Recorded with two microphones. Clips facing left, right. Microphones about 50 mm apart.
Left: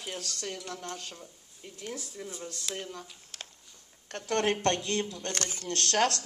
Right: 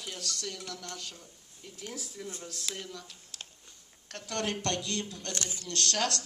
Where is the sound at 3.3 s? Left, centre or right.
Left.